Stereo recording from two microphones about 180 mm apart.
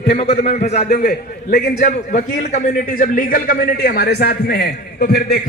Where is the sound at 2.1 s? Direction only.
40° left (ahead or behind).